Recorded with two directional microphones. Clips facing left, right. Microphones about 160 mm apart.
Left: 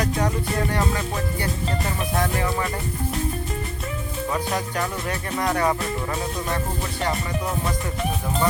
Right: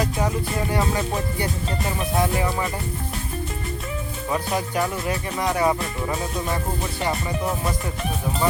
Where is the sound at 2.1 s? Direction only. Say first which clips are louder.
Right 2 dB; 15° right (ahead or behind).